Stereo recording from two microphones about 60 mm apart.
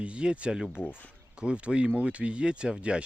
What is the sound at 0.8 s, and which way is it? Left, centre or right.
Speech, left.